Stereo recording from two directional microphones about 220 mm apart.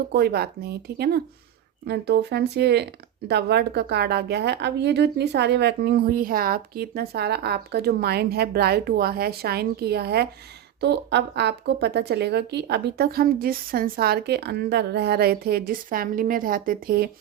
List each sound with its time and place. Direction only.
0.1 s a woman's voice: 45° right (ahead or behind)